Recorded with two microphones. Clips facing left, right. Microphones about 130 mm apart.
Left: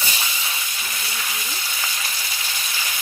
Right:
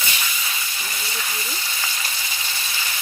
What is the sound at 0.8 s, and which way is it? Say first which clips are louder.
Frying: even; centre (ahead or behind).